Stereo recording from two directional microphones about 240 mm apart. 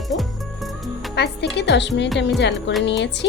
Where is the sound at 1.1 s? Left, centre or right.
Left.